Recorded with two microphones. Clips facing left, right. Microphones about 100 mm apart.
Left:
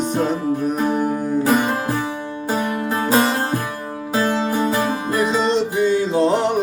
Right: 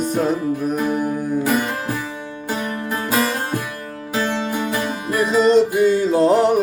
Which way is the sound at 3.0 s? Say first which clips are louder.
Left 3 dB; 30° left (ahead or behind).